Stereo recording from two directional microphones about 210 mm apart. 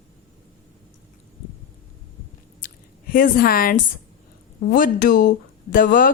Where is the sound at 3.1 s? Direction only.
45° left (ahead or behind).